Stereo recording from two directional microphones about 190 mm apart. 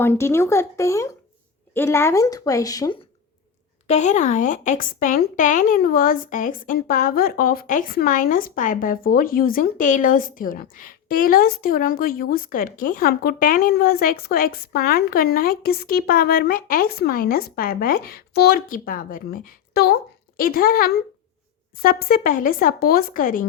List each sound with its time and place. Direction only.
0.0 s speech: 15° left (ahead or behind)
3.8 s speech: 35° left (ahead or behind)